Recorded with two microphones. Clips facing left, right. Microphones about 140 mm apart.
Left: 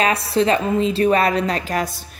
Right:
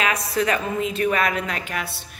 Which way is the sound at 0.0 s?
30° left (ahead or behind).